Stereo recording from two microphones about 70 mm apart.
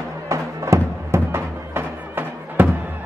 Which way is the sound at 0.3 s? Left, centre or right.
Right.